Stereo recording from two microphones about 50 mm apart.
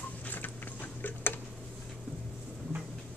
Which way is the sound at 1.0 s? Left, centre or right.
Left.